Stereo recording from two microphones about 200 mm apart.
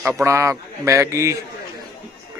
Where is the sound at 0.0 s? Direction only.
10° right (ahead or behind).